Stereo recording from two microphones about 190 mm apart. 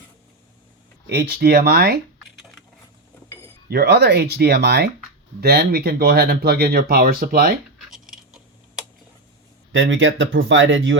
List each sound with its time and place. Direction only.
1.0 s speech: 60° right (ahead or behind)
3.7 s speech: 60° right (ahead or behind)
7.9 s a sound: centre (ahead or behind)
9.7 s speech: 85° right